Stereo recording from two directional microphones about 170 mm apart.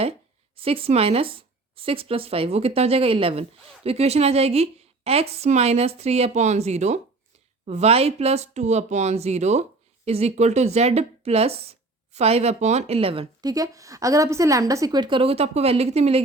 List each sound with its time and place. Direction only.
0.5 s speech: 35° right (ahead or behind)
13.4 s a woman's voice: 20° right (ahead or behind); by 16.2 s 40° right (ahead or behind)